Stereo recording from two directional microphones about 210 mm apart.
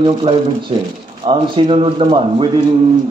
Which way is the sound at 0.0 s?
25° right (ahead or behind).